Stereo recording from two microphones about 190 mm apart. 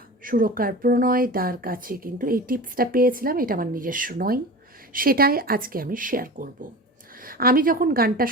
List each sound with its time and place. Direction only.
0.3 s a woman's voice: 45° right (ahead or behind)